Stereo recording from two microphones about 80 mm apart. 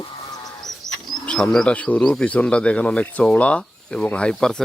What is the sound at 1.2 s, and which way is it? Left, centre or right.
Speech, centre.